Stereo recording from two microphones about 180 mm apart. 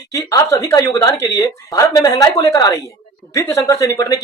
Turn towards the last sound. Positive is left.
turn(degrees=20)  # may be behind; listen again after turning